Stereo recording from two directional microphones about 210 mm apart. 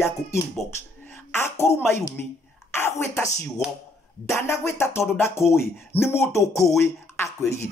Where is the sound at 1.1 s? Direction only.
10° left (ahead or behind).